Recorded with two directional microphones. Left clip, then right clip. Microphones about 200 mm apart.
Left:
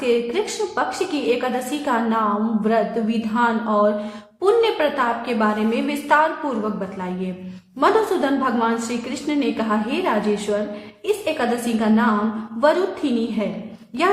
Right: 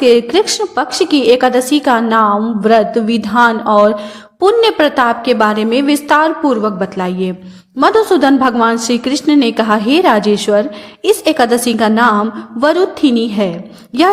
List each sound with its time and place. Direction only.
0.0 s a woman's voice: 45° right (ahead or behind)